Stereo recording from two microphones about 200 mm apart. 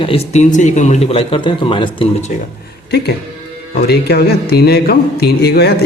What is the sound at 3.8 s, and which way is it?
Speech, 50° left (ahead or behind).